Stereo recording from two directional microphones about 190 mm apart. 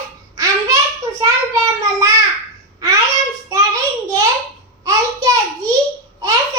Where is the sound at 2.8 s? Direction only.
15° right (ahead or behind).